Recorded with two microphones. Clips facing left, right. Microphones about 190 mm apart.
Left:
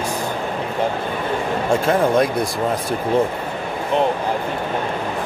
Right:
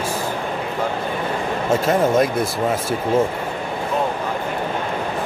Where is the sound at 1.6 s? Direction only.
5° right (ahead or behind).